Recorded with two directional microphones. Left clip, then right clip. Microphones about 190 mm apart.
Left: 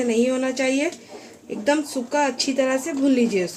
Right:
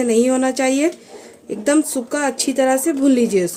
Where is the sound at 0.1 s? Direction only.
60° right (ahead or behind).